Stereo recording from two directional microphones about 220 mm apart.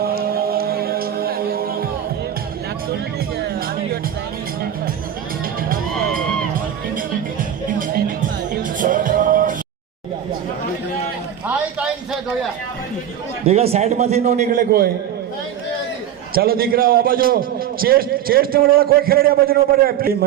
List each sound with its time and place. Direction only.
0.0 s music: 45° right (ahead or behind)
5.6 s music: 40° right (ahead or behind)
7.7 s music: 35° right (ahead or behind)
13.4 s a man's voice: 25° right (ahead or behind); by 14.9 s 45° right (ahead or behind)
16.3 s a man's voice: 45° right (ahead or behind)